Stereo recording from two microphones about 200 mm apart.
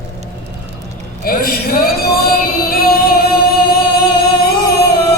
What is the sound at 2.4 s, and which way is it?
Music, 50° left (ahead or behind).